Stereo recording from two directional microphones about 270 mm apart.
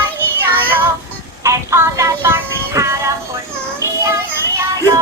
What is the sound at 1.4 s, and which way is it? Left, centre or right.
Music, centre.